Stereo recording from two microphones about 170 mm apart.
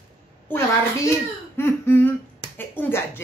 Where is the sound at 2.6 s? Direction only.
10° left (ahead or behind).